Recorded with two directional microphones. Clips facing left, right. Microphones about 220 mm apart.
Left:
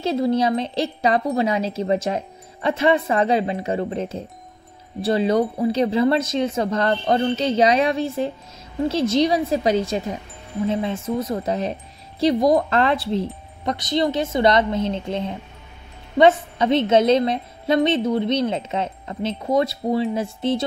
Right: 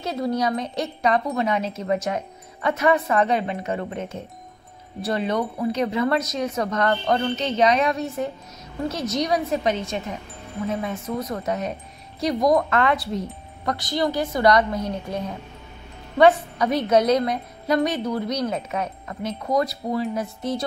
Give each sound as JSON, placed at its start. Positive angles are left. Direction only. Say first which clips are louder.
{"t": 0.0, "sound": "wind chime", "louder": "left 4 dB", "side_deg": 25}
{"t": 8.8, "sound": "a woman's voice", "louder": "left 6 dB", "side_deg": 30}